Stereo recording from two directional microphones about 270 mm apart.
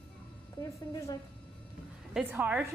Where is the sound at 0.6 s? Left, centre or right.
Centre.